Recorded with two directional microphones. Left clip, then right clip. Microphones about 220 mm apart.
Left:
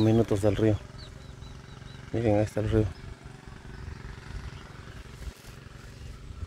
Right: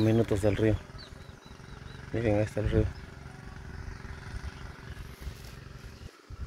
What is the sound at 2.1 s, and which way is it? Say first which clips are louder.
Speech: left 3 dB; 20° left (ahead or behind).